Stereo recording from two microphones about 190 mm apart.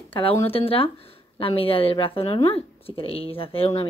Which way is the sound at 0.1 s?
30° left (ahead or behind).